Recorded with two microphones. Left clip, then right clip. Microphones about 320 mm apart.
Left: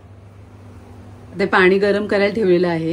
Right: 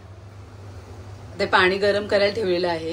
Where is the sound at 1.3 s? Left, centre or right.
Left.